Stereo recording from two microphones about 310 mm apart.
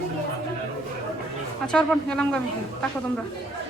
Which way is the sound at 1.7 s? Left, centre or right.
Centre.